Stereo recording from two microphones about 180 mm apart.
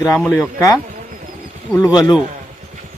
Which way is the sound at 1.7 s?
20° left (ahead or behind).